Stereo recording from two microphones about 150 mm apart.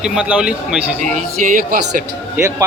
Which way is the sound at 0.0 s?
5° right (ahead or behind).